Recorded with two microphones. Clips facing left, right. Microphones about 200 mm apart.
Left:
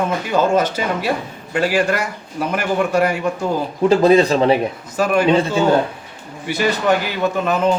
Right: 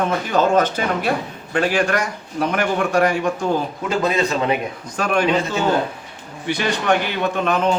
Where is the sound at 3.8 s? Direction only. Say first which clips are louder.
Left 10 dB; 35° left (ahead or behind).